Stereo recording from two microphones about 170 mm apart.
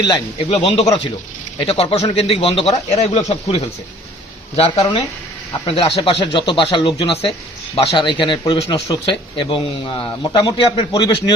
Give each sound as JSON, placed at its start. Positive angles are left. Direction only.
{"t": 0.0, "sound": "a man's voice", "side_deg": 30}